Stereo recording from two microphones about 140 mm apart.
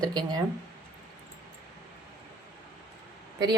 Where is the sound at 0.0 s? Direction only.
30° right (ahead or behind).